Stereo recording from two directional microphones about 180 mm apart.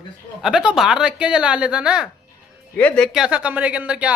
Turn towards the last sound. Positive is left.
turn(degrees=-5)  # may be behind; listen again after turning